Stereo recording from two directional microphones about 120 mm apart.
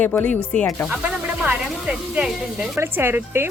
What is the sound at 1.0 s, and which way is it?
Speech, 10° right (ahead or behind).